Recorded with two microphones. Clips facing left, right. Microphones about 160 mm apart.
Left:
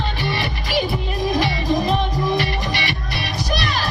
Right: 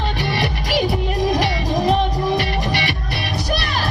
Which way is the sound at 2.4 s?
55° right (ahead or behind).